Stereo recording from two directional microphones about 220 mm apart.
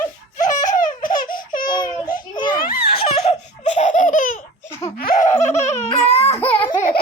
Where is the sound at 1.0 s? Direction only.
40° left (ahead or behind).